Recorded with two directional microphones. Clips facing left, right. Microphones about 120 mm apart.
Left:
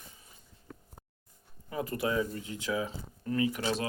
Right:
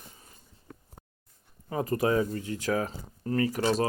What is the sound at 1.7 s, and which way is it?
Speech, 40° right (ahead or behind).